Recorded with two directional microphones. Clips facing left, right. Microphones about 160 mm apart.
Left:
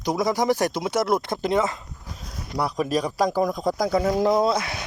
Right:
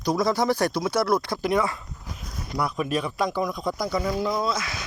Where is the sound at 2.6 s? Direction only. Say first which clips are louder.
Left 2 dB; 35° left (ahead or behind).